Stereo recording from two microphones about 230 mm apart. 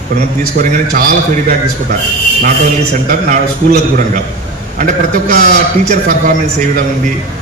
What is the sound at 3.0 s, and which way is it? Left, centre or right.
A man's voice, right.